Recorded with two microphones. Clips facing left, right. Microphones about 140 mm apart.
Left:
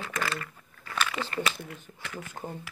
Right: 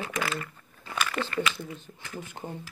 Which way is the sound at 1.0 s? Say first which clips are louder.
Right 1 dB; centre (ahead or behind).